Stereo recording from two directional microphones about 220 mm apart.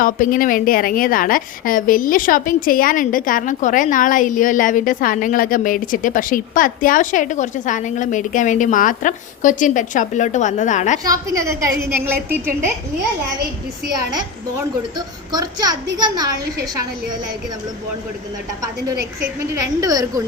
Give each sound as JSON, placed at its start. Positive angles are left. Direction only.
{"t": 0.0, "sound": "a woman's voice", "side_deg": 40}
{"t": 11.0, "sound": "a woman's voice", "side_deg": -15}
{"t": 14.6, "sound": "a woman's voice", "side_deg": -20}
{"t": 19.5, "sound": "a woman's voice", "side_deg": -15}